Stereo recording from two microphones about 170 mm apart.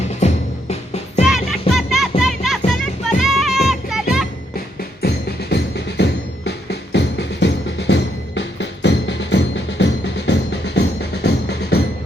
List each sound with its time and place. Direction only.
1.2 s music: centre (ahead or behind)
5.0 s music: 75° left (ahead or behind)